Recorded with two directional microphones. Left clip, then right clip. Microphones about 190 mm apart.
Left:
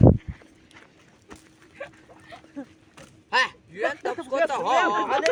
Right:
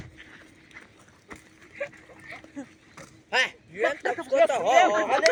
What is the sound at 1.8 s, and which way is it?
Dog, 10° left (ahead or behind).